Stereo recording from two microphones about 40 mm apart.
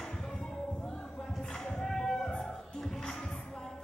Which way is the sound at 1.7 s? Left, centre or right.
Centre.